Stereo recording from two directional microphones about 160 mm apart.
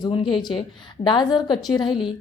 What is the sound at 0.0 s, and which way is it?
A woman's voice, 30° left (ahead or behind).